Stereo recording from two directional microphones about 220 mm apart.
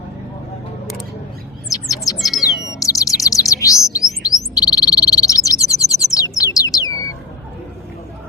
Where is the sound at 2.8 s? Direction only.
15° left (ahead or behind).